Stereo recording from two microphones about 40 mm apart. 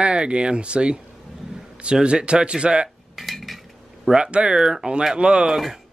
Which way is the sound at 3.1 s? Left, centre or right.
Centre.